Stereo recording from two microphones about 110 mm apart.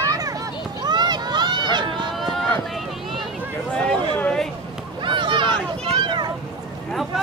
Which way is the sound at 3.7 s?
5° left (ahead or behind).